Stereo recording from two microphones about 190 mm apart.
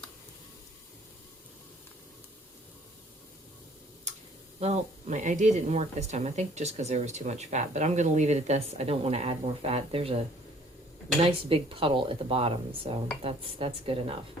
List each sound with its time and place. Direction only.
4.6 s speech: 35° right (ahead or behind)
11.2 s speech: 30° right (ahead or behind)